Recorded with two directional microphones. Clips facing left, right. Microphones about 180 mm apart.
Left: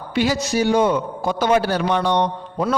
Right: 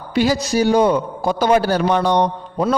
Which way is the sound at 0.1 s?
40° right (ahead or behind).